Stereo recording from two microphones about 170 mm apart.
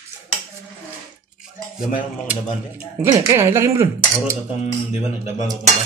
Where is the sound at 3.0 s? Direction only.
15° right (ahead or behind).